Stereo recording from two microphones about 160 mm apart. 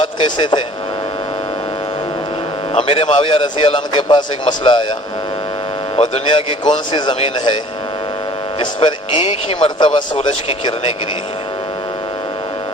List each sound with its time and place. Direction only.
0.0 s speech: 30° left (ahead or behind)
2.7 s a man's voice: 35° left (ahead or behind)
6.0 s a man's voice: 30° left (ahead or behind)
8.5 s a man's voice: 35° left (ahead or behind)